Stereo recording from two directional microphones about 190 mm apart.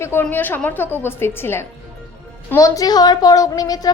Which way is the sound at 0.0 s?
10° left (ahead or behind).